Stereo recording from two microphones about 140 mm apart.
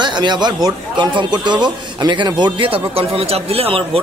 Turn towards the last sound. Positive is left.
turn(degrees=-40)  # may be behind; listen again after turning